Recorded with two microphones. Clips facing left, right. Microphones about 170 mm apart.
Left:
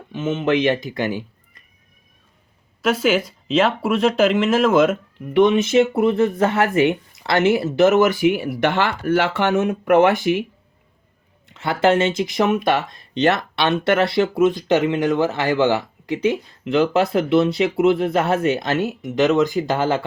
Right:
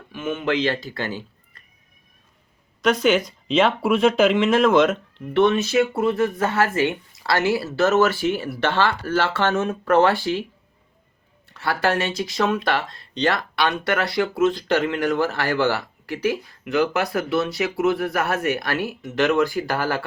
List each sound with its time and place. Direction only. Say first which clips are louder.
0.1 s speech: left 4 dB; 20° left (ahead or behind)
2.8 s speech: even; 5° left (ahead or behind)
11.4 s speech: left 5 dB; 20° left (ahead or behind)